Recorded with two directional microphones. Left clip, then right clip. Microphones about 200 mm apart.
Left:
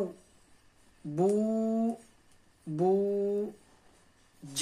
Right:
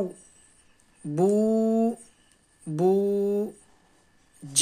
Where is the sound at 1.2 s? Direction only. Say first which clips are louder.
Right 6 dB; 45° right (ahead or behind).